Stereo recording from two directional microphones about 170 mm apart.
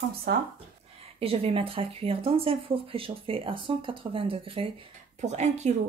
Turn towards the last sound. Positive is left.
turn(degrees=-40)  # may be behind; listen again after turning